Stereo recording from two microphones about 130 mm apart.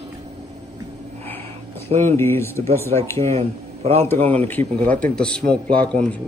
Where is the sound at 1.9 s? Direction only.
65° right (ahead or behind).